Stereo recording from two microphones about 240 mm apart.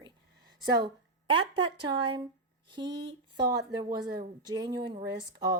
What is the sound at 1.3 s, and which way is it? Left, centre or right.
Speech, centre.